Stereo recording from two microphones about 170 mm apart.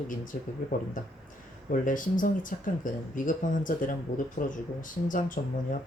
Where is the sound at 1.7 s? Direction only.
50° left (ahead or behind).